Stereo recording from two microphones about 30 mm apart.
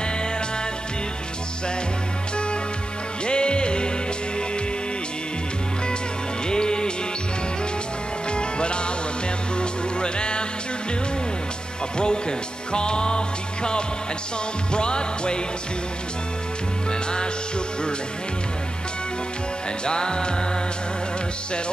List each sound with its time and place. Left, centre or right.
3.3 s music: left
6.4 s music: left
8.3 s music: left
12.0 s music: left
19.8 s music: left